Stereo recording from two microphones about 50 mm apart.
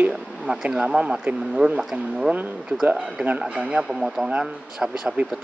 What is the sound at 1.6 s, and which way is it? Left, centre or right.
Speech, right.